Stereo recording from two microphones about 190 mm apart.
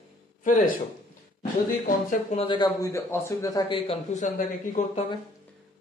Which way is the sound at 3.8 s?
40° left (ahead or behind).